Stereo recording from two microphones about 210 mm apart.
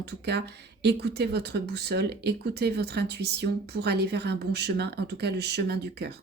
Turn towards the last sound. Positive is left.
turn(degrees=-50)  # may be behind; listen again after turning